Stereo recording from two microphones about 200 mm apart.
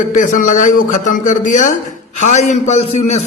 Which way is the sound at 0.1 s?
40° left (ahead or behind).